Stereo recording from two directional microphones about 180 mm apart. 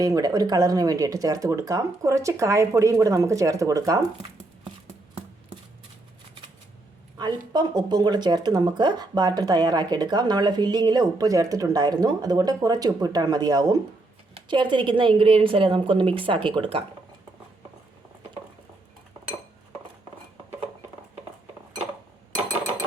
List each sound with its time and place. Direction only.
0.0 s speech: 20° right (ahead or behind)
7.2 s speech: 25° right (ahead or behind)